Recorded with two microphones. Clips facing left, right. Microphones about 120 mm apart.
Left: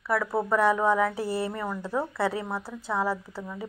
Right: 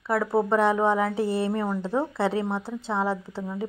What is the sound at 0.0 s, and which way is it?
Speech, 25° right (ahead or behind).